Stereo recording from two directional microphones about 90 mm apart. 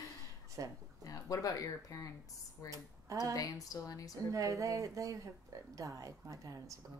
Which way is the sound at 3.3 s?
40° left (ahead or behind).